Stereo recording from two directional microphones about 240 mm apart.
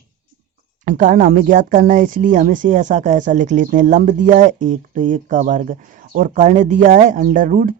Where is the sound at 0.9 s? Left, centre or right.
Right.